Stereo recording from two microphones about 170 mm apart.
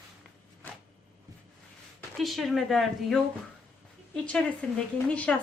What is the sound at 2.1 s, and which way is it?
A woman's voice, centre (ahead or behind).